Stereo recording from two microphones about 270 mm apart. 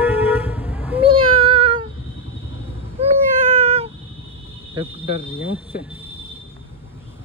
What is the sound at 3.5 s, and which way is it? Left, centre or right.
Cat, right.